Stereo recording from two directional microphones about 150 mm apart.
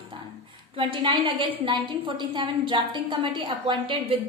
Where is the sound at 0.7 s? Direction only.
35° right (ahead or behind).